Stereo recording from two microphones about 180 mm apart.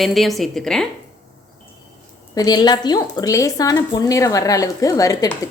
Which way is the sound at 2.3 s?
20° left (ahead or behind).